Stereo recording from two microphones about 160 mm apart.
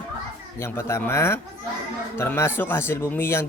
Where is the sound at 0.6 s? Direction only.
15° left (ahead or behind).